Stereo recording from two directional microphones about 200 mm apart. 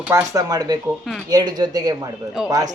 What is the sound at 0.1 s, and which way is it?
Speech, 15° right (ahead or behind).